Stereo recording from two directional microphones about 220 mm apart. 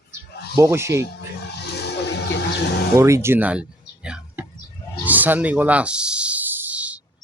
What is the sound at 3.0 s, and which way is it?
Speech, 10° right (ahead or behind).